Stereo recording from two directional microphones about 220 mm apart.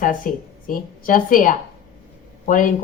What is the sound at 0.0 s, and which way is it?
Speech, 40° left (ahead or behind).